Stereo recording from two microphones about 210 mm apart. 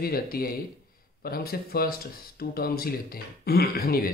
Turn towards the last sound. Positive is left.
turn(degrees=45)  # may be behind; listen again after turning